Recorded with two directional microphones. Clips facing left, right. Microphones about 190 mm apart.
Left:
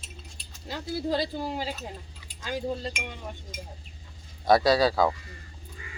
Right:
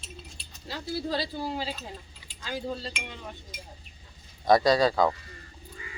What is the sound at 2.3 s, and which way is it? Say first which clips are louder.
Speech: left 3 dB; 50° left (ahead or behind).